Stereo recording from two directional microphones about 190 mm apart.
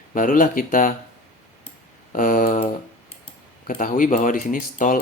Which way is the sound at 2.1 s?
45° left (ahead or behind).